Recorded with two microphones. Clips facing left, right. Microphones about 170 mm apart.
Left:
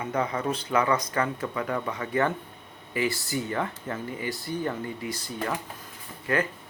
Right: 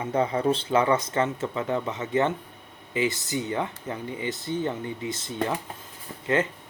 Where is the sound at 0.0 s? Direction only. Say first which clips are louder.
Right 4 dB; 30° right (ahead or behind).